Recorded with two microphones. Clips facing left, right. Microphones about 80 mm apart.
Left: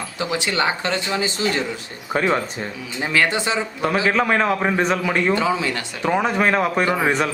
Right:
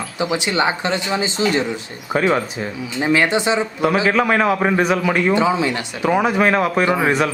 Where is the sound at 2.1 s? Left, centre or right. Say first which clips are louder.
Right 2 dB; centre.